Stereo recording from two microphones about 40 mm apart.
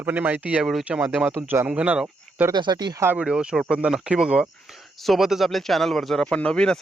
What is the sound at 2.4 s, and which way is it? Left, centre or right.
Speech, right.